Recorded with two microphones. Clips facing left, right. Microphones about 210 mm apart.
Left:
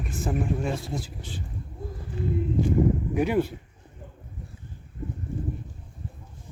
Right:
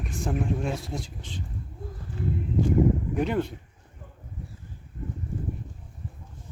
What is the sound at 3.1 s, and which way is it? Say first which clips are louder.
Speech: left 2 dB; 10° left (ahead or behind).